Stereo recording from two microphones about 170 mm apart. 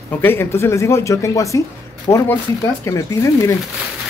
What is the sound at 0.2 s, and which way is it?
Speech, 15° left (ahead or behind).